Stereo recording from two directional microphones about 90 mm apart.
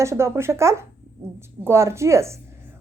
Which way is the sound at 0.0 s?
30° right (ahead or behind).